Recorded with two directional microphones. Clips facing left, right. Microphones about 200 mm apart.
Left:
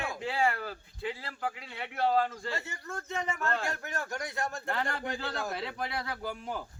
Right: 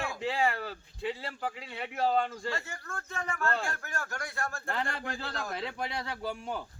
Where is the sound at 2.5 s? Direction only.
20° left (ahead or behind).